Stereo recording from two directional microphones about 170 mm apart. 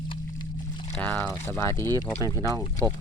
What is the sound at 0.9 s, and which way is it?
Speech, 5° left (ahead or behind).